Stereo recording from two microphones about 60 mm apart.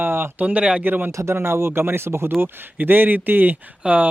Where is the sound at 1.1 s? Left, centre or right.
Right.